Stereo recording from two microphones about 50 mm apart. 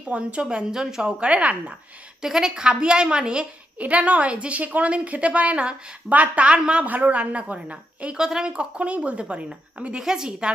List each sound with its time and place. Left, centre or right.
0.1 s a woman's voice: right
0.4 s a woman's voice: centre; by 1.7 s right
2.2 s a woman's voice: centre
3.8 s a woman's voice: right
6.8 s a woman's voice: right; by 10.5 s centre